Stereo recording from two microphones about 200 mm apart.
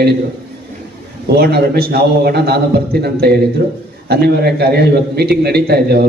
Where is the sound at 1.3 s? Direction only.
50° right (ahead or behind).